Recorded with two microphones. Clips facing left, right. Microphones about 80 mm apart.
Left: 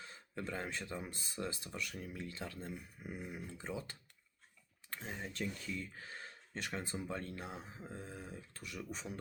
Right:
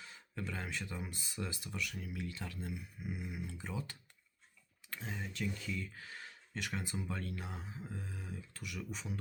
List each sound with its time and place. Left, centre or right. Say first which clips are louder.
0.0 s speech: even; left